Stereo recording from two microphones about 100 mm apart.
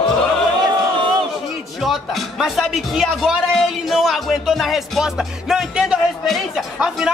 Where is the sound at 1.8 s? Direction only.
Centre (ahead or behind).